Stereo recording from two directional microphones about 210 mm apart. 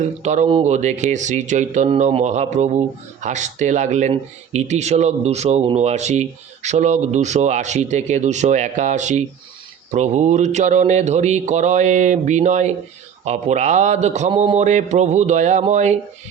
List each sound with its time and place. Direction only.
0.0 s speech: 35° right (ahead or behind)